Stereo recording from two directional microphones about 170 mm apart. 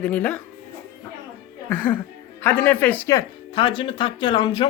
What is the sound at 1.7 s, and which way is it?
Speech, 10° left (ahead or behind).